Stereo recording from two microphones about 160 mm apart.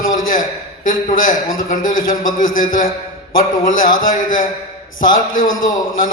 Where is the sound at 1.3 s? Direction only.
60° left (ahead or behind).